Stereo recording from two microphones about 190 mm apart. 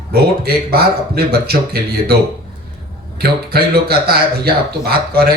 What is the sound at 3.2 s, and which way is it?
Speech, 55° right (ahead or behind).